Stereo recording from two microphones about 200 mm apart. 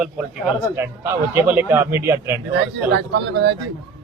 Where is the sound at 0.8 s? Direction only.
15° right (ahead or behind).